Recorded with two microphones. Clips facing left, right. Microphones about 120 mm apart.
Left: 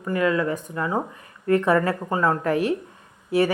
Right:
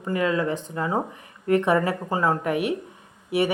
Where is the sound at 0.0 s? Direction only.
25° right (ahead or behind).